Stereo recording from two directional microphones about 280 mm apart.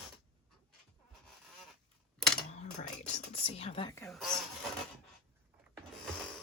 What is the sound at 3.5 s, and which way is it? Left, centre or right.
Speech, left.